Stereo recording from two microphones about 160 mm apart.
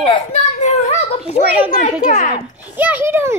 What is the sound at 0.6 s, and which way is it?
Children playing, 45° left (ahead or behind).